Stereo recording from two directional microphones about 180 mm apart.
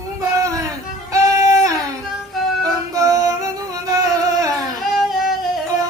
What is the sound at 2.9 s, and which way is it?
Music, 20° right (ahead or behind).